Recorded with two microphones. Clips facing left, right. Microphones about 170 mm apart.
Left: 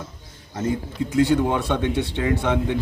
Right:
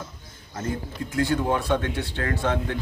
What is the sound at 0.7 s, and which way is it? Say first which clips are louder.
A man's voice: left 6 dB; 20° left (ahead or behind).